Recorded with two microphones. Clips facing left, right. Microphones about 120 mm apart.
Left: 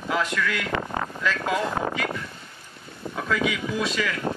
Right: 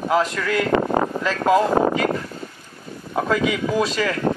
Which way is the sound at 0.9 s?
40° right (ahead or behind).